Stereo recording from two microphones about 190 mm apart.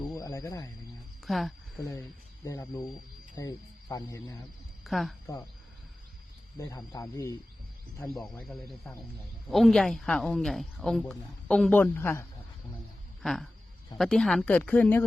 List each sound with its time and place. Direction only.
0.0 s a sound: 20° left (ahead or behind)
1.2 s a sound: centre (ahead or behind)
1.9 s speech: 15° left (ahead or behind)
4.8 s speech: centre (ahead or behind)
5.2 s speech: 15° left (ahead or behind)
6.6 s speech: 20° left (ahead or behind)
8.2 s speech: 5° left (ahead or behind)
13.2 s speech: centre (ahead or behind)